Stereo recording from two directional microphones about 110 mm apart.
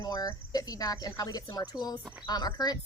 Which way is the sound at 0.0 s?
35° left (ahead or behind).